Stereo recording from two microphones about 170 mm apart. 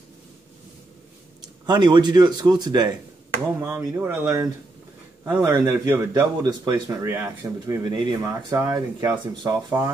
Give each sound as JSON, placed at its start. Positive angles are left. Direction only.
{"t": 1.4, "sound": "speech", "side_deg": -25}
{"t": 3.5, "sound": "speech", "side_deg": -15}